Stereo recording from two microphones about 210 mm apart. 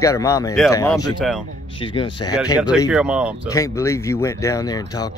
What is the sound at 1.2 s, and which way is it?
Speech, 5° right (ahead or behind).